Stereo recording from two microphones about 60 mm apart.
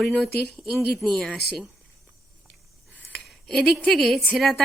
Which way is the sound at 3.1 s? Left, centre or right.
Centre.